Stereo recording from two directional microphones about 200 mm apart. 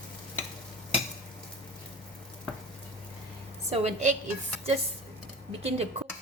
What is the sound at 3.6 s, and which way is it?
Dishes, 30° right (ahead or behind).